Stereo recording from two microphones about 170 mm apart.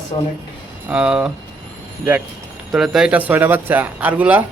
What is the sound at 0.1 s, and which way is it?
Speech, 30° left (ahead or behind).